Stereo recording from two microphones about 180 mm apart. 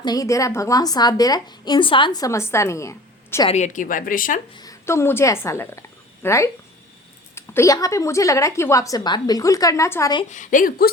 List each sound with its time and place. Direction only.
0.0 s a woman's voice: 20° left (ahead or behind)
3.5 s speech: 45° left (ahead or behind)
4.5 s a woman's voice: 20° left (ahead or behind)
10.2 s speech: 45° left (ahead or behind)